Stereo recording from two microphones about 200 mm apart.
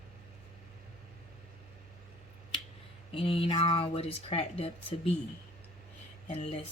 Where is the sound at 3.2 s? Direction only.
30° left (ahead or behind).